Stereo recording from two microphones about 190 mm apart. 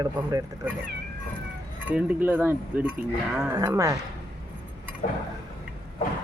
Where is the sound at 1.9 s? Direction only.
10° right (ahead or behind).